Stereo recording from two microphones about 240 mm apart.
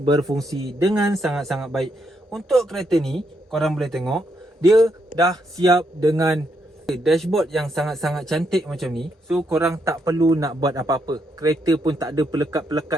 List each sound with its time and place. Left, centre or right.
0.0 s a man's voice: centre
0.9 s speech: centre
5.1 s a man's voice: centre
6.8 s speech: centre
9.5 s a man's voice: centre